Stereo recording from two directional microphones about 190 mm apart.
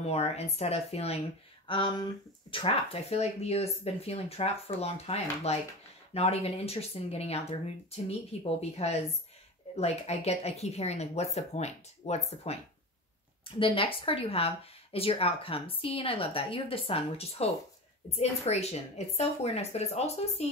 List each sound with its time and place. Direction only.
0.0 s speech: 35° left (ahead or behind)